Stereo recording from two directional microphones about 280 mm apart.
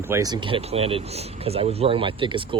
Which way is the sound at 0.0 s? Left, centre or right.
Centre.